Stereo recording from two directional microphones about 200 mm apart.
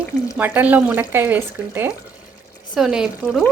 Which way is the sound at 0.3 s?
10° right (ahead or behind).